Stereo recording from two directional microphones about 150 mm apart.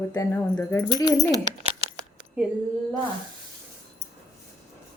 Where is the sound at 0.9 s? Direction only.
25° left (ahead or behind).